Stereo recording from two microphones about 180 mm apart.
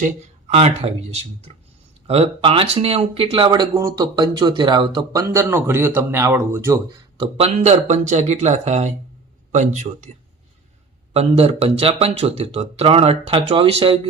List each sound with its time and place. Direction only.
0.0 s speech: 35° right (ahead or behind); by 6.7 s 15° right (ahead or behind)
7.2 s speech: 30° right (ahead or behind)
11.1 s speech: 35° right (ahead or behind)